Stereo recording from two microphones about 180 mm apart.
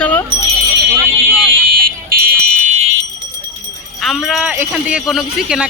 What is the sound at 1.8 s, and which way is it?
Fire alarm, 55° right (ahead or behind).